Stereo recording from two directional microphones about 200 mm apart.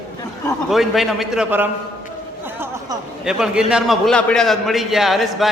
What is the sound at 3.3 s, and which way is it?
A man's voice, 5° right (ahead or behind).